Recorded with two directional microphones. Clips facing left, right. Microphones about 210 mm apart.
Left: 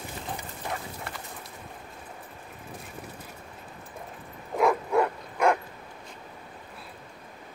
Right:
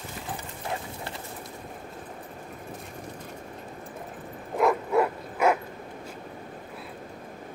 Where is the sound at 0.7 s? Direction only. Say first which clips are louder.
Right 3 dB; 25° right (ahead or behind).